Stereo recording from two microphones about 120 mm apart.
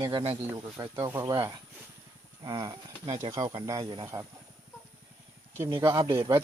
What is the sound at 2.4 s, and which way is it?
Speech, 30° right (ahead or behind).